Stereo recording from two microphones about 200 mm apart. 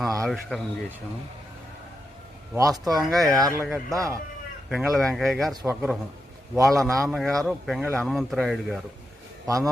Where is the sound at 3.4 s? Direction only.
15° right (ahead or behind).